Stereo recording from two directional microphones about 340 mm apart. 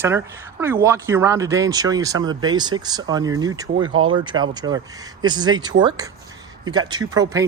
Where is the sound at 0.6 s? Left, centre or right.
Centre.